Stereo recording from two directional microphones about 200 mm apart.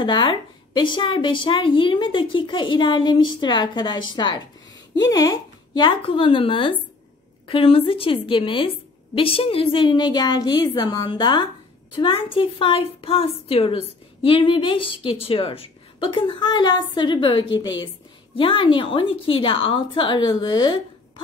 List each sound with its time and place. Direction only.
0.0 s a woman's voice: 25° left (ahead or behind)